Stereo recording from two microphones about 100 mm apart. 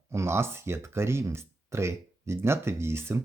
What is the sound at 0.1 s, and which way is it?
Speech, 25° right (ahead or behind).